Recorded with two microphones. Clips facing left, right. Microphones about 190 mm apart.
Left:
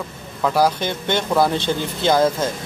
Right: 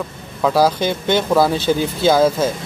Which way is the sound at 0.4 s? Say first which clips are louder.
Right 3 dB; 10° right (ahead or behind).